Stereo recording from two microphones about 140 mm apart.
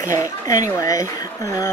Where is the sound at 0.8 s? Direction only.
25° left (ahead or behind).